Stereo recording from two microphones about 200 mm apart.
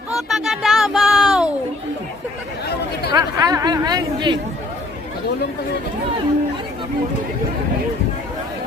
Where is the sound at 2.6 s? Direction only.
55° left (ahead or behind).